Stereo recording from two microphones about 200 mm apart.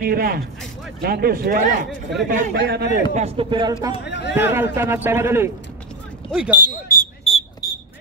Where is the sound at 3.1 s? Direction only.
30° right (ahead or behind).